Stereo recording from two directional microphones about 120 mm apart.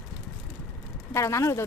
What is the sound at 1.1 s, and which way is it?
Speech, 25° left (ahead or behind).